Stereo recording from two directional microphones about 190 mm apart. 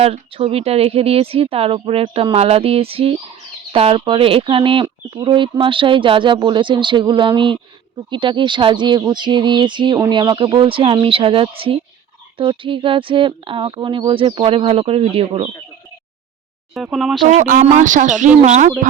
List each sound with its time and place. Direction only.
0.0 s speech: 30° right (ahead or behind)
16.7 s speech: centre (ahead or behind)
17.2 s speech: 45° right (ahead or behind)